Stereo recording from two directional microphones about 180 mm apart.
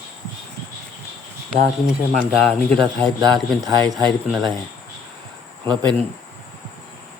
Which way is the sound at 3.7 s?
20° right (ahead or behind).